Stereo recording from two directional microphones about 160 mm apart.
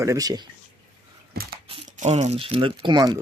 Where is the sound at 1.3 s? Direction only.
70° right (ahead or behind).